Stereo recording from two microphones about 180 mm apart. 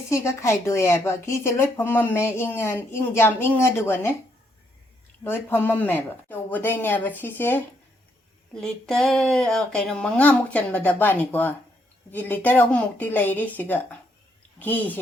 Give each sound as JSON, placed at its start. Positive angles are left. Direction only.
{"t": 0.1, "sound": "speech", "side_deg": 15}
{"t": 5.2, "sound": "speech", "side_deg": 10}
{"t": 8.6, "sound": "speech", "side_deg": 5}